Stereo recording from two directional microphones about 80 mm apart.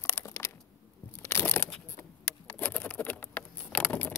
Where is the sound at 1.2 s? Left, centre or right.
Left.